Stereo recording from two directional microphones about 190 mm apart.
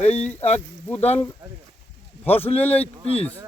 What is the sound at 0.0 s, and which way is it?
Speech, 35° left (ahead or behind).